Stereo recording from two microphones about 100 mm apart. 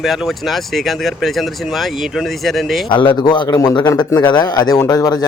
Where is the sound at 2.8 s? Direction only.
50° left (ahead or behind).